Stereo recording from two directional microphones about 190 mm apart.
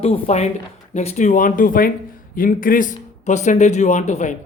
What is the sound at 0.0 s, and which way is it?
Speech, 30° left (ahead or behind).